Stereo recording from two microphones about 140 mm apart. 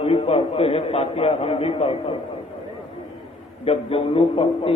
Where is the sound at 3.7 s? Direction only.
40° left (ahead or behind).